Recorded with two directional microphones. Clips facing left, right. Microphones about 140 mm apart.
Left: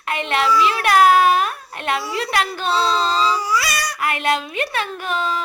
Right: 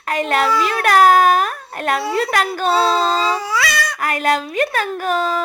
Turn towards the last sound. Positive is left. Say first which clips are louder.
# right 4 dB
turn(degrees=-40)  # may be behind; listen again after turning